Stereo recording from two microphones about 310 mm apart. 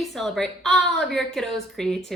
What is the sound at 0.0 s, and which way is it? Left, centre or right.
A woman's voice, centre.